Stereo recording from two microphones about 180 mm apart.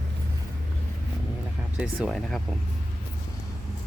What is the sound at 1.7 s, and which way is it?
Speech, centre (ahead or behind).